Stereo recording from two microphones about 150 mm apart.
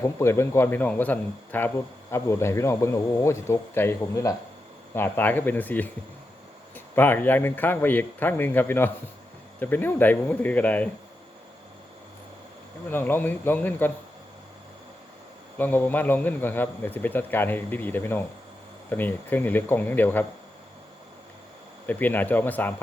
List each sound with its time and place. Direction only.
0.2 s a man's voice: 15° left (ahead or behind)
12.9 s a man's voice: 15° left (ahead or behind)
15.5 s a man's voice: 10° left (ahead or behind)
21.8 s a man's voice: 10° left (ahead or behind)